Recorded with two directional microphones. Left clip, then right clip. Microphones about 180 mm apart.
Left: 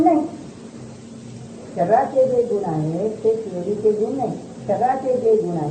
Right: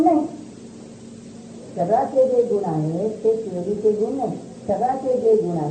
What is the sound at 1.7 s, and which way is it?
A woman's voice, 30° left (ahead or behind).